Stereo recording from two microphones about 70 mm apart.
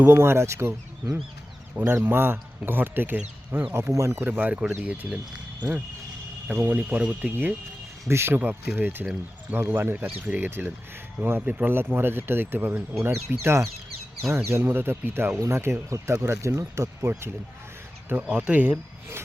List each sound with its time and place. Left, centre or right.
0.0 s speech: right
1.8 s speech: right
3.2 s speech: centre
3.9 s speech: right
4.2 s speech: right
6.7 s speech: centre
8.1 s speech: right
8.4 s speech: right
10.2 s speech: right
10.4 s speech: right
13.0 s speech: right
18.1 s speech: centre